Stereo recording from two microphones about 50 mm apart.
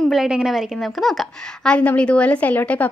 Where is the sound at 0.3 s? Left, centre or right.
Centre.